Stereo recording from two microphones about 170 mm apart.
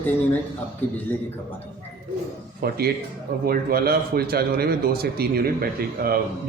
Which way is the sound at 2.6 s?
65° right (ahead or behind).